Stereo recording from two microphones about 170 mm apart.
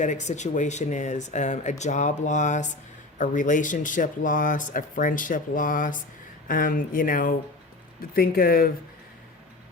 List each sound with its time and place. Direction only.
0.0 s speech: 45° left (ahead or behind); by 8.7 s 60° left (ahead or behind)